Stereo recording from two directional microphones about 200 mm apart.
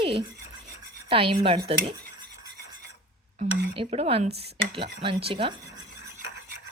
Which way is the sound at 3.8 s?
30° right (ahead or behind).